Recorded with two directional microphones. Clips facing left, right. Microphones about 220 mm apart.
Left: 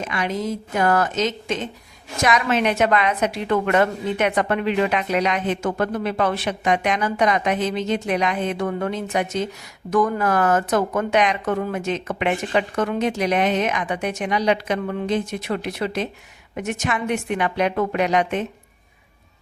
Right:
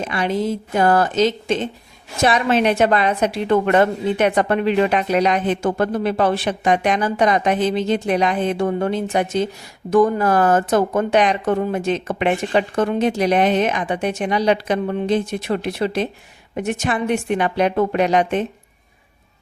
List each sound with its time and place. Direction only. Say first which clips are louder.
0.0 s a woman's voice: right 4 dB; 30° right (ahead or behind)